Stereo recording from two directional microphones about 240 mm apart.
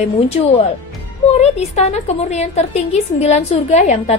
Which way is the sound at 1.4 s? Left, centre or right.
Left.